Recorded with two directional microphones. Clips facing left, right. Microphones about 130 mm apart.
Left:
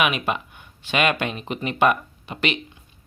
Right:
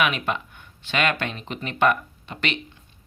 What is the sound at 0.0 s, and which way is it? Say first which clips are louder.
Speech: left 1 dB; 15° left (ahead or behind).